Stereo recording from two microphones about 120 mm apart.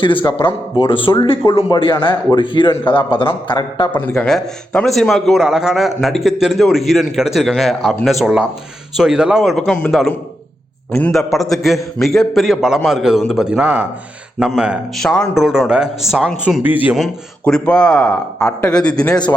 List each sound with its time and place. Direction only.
0.0 s a man's voice: 45° left (ahead or behind)
4.2 s a man's voice: 5° left (ahead or behind)
14.9 s a man's voice: 5° left (ahead or behind)
16.6 s speech: 15° right (ahead or behind)
16.9 s speech: 5° left (ahead or behind)